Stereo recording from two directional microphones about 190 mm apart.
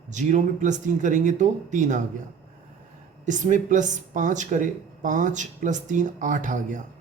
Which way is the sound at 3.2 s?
40° right (ahead or behind).